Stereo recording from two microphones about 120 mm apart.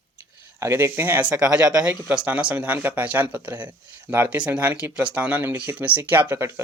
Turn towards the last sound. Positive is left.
turn(degrees=-20)  # may be behind; listen again after turning